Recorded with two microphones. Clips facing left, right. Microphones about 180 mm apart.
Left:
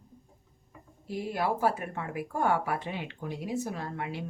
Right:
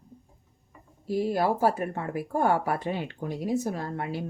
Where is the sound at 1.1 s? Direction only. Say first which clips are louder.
Right 5 dB; 40° right (ahead or behind).